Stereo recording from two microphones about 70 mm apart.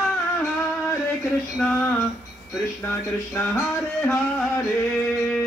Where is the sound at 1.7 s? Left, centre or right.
Left.